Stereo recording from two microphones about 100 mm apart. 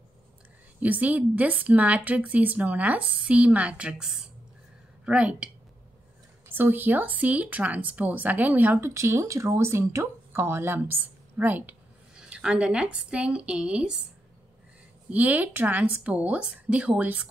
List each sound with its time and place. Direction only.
0.7 s speech: 15° right (ahead or behind)
6.5 s speech: 20° right (ahead or behind)
8.9 s speech: 30° right (ahead or behind); by 14.0 s 10° right (ahead or behind)
15.0 s speech: 15° right (ahead or behind)